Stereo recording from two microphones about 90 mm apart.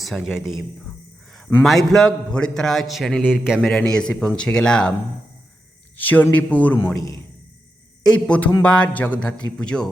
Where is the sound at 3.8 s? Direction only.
10° left (ahead or behind).